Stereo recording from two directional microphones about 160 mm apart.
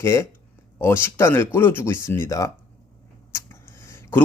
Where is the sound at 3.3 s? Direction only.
15° left (ahead or behind).